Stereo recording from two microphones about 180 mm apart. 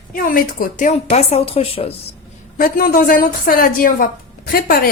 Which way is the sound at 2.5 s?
50° left (ahead or behind).